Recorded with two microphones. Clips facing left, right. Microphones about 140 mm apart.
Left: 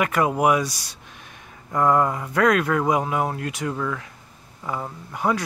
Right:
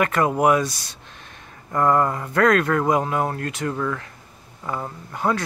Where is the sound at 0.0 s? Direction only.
10° left (ahead or behind).